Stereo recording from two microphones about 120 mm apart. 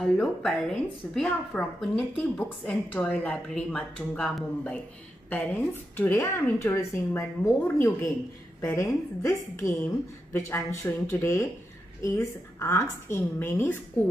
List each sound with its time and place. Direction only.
0.0 s a woman's voice: 5° left (ahead or behind)
5.7 s speech: 20° left (ahead or behind)